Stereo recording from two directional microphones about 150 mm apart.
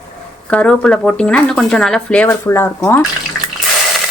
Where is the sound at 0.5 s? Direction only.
5° left (ahead or behind).